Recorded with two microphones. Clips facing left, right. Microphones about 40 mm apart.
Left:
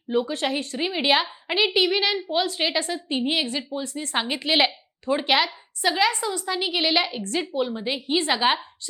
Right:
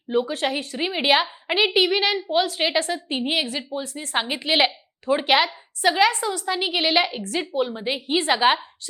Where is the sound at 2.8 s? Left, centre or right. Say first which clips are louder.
Right 3 dB; right.